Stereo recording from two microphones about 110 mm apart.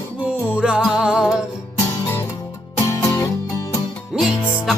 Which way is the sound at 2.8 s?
30° left (ahead or behind).